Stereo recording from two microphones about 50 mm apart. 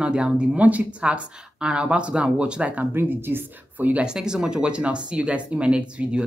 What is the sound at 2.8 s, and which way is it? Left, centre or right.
Speech, right.